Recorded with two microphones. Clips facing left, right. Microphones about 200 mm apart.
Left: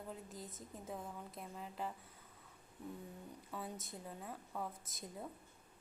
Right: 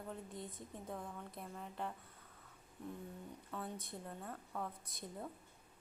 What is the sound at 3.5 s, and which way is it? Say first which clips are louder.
A woman's voice: right 1 dB; 5° left (ahead or behind).